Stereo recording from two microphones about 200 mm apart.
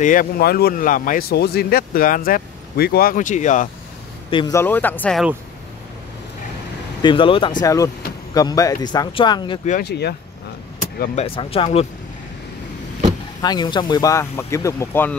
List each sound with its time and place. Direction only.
0.0 s speech: 45° left (ahead or behind)
4.3 s a man's voice: 25° left (ahead or behind)
4.6 s speech: 10° left (ahead or behind)
7.0 s speech: 25° left (ahead or behind)
9.7 s speech: 50° left (ahead or behind)
11.1 s speech: 30° left (ahead or behind)
13.4 s speech: 20° left (ahead or behind)